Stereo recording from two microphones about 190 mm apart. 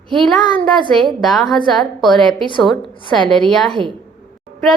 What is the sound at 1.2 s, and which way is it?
A woman's voice, centre (ahead or behind).